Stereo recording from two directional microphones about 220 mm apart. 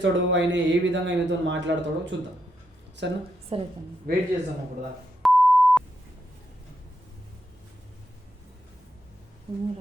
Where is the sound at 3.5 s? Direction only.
25° right (ahead or behind).